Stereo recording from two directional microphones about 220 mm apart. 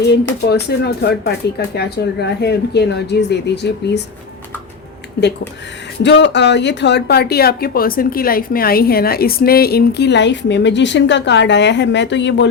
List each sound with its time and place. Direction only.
0.0 s speech: 50° left (ahead or behind)
6.0 s speech: 55° left (ahead or behind)